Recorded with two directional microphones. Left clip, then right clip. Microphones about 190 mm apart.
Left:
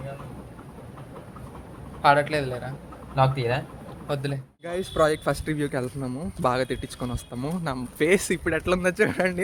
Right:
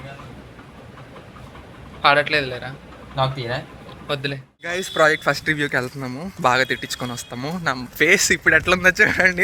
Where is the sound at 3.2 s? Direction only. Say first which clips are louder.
Even; 25° left (ahead or behind).